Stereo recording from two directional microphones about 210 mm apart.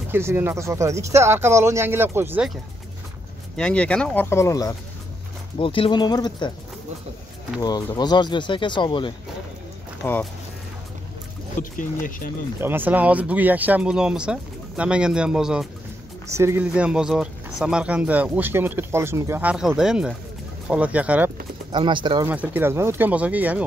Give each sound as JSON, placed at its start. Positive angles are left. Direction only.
{"t": 0.1, "sound": "speech", "side_deg": -10}
{"t": 3.5, "sound": "speech", "side_deg": 5}
{"t": 7.6, "sound": "speech", "side_deg": 20}
{"t": 10.0, "sound": "speech", "side_deg": 10}
{"t": 11.8, "sound": "speech", "side_deg": 40}
{"t": 12.5, "sound": "speech", "side_deg": -10}
{"t": 16.3, "sound": "speech", "side_deg": -15}
{"t": 21.7, "sound": "speech", "side_deg": -20}
{"t": 22.3, "sound": "speech", "side_deg": -10}